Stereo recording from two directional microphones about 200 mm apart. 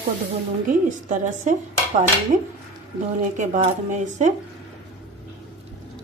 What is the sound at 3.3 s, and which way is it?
Speech, 40° right (ahead or behind).